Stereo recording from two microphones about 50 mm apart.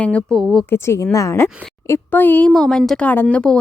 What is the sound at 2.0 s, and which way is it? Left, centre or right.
Speech, left.